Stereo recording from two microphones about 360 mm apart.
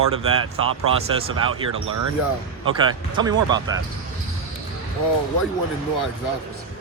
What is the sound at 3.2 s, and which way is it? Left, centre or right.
Speech, centre.